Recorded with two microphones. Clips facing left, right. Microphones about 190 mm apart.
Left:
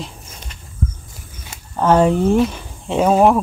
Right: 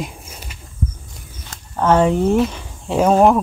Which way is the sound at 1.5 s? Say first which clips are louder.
Left 1 dB; 5° left (ahead or behind).